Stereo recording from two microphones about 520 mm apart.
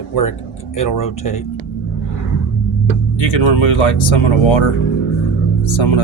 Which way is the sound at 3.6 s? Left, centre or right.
Left.